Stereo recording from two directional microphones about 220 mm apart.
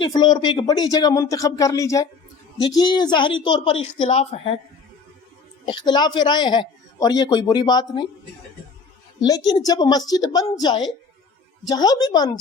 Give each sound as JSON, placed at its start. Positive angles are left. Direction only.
{"t": 0.0, "sound": "speech", "side_deg": 20}
{"t": 5.6, "sound": "speech", "side_deg": 20}
{"t": 9.6, "sound": "speech", "side_deg": 20}
{"t": 11.7, "sound": "speech", "side_deg": 20}